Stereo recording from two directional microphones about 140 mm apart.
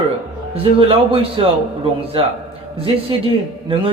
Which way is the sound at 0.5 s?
40° right (ahead or behind).